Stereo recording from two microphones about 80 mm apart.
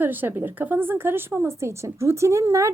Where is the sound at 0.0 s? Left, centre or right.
Right.